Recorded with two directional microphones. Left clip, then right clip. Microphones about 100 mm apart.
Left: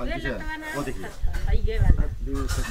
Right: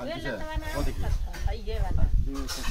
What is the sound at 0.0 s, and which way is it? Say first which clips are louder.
Speech: left 3 dB; 10° right (ahead or behind).